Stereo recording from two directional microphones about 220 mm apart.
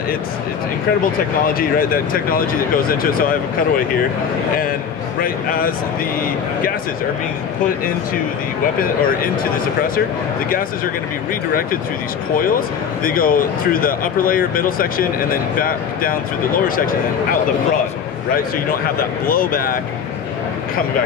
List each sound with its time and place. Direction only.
1.6 s speech: 40° left (ahead or behind)
5.2 s speech: 40° left (ahead or behind)
8.7 s speech: 40° left (ahead or behind)
12.4 s speech: 40° left (ahead or behind)
19.2 s speech: 40° left (ahead or behind)